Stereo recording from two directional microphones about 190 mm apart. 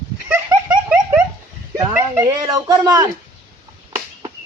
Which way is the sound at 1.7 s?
15° right (ahead or behind).